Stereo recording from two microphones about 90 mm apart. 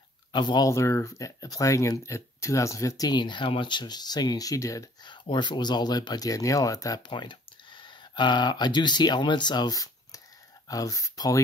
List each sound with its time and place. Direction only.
0.3 s speech: 55° left (ahead or behind)
0.7 s speech: 35° left (ahead or behind)
3.1 s speech: 55° left (ahead or behind); by 4.8 s 35° left (ahead or behind)
5.0 s speech: 60° left (ahead or behind); by 7.1 s 40° left (ahead or behind)
7.1 s speech: 60° left (ahead or behind); by 11.4 s 40° left (ahead or behind)